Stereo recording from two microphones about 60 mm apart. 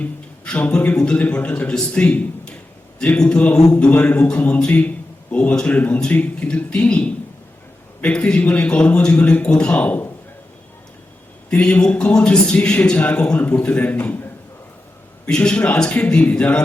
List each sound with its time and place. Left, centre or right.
0.0 s a man's voice: left
11.5 s a man's voice: centre
13.9 s a man's voice: left
15.3 s a man's voice: centre